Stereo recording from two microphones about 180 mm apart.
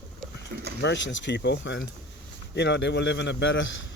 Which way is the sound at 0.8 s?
85° left.